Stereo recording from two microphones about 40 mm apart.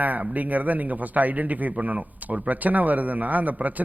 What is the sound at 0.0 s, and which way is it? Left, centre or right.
A man's voice, right.